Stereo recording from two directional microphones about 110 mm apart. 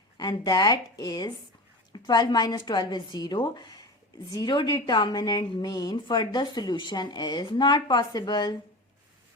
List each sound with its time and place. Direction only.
0.2 s a woman's voice: 40° left (ahead or behind)